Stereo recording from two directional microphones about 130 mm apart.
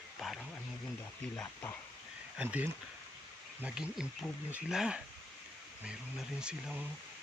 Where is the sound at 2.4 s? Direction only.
15° right (ahead or behind).